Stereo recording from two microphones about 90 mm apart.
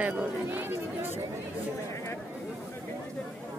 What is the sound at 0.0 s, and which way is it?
Chatter, 20° right (ahead or behind).